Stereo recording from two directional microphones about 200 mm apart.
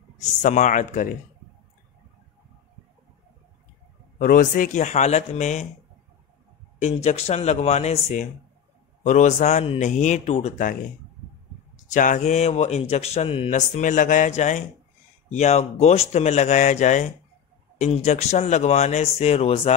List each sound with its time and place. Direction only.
0.2 s speech: 40° left (ahead or behind)
4.2 s speech: 40° left (ahead or behind)
6.8 s speech: 35° left (ahead or behind)